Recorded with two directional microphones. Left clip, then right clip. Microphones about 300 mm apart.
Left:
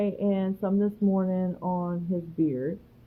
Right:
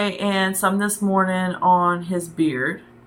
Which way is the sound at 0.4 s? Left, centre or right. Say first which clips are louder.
Right 8 dB; right.